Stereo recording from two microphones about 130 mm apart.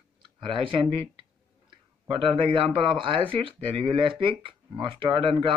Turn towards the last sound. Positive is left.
turn(degrees=-35)  # may be behind; listen again after turning